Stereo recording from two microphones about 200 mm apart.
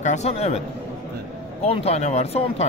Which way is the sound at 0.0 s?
35° left (ahead or behind).